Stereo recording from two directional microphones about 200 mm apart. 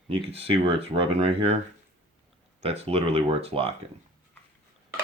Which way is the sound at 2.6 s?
30° right (ahead or behind).